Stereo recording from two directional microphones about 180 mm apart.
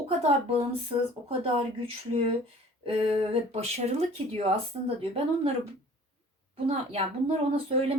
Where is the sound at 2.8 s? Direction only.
30° right (ahead or behind).